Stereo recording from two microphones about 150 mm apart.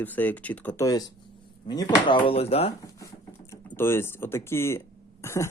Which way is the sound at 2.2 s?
40° left (ahead or behind).